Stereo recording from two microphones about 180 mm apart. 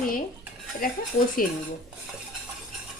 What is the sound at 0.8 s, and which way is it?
Speech, 55° left (ahead or behind).